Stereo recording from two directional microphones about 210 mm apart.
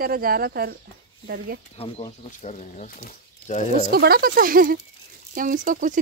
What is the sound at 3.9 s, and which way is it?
Speech, 45° right (ahead or behind).